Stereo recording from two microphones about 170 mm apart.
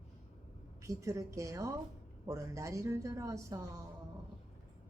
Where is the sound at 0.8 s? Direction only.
20° right (ahead or behind).